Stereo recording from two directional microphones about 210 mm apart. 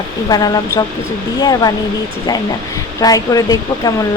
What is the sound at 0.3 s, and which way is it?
Speech, 20° left (ahead or behind).